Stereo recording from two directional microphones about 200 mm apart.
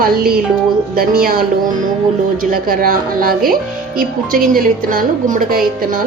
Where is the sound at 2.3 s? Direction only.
45° right (ahead or behind).